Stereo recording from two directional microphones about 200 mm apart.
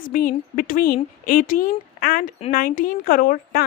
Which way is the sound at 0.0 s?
45° left (ahead or behind).